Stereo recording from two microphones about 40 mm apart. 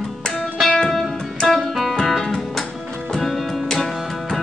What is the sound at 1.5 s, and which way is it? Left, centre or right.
Music, centre.